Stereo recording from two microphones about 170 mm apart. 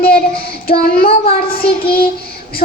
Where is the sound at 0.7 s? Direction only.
65° left (ahead or behind).